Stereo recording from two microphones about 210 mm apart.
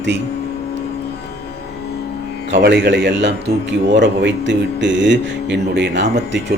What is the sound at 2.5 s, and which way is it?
A man's voice, 55° right (ahead or behind).